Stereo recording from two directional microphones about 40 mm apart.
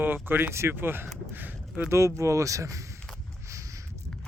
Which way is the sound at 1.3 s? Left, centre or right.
Right.